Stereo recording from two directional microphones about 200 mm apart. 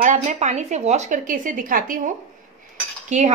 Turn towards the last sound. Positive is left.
turn(degrees=-35)  # may be behind; listen again after turning